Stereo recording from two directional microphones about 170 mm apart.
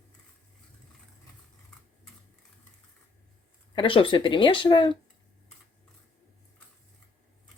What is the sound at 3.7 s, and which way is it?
Speech, 30° left (ahead or behind).